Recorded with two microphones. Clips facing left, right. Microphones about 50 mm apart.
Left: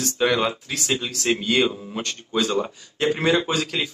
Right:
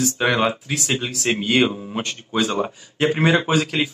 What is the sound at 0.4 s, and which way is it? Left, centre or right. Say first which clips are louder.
Speech: right 3 dB; centre.